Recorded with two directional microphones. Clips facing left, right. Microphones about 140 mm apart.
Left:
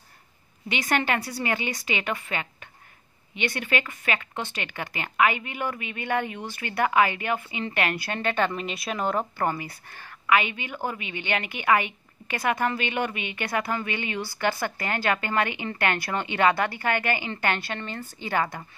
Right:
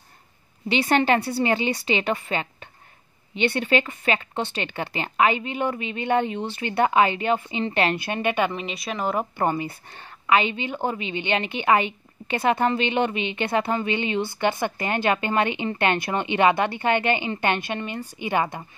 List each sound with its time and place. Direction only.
0.7 s a woman's voice: 30° right (ahead or behind)
8.5 s speech: centre (ahead or behind)
9.2 s a woman's voice: 20° right (ahead or behind)